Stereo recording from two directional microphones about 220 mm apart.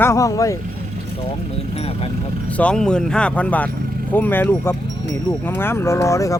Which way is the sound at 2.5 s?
5° left (ahead or behind).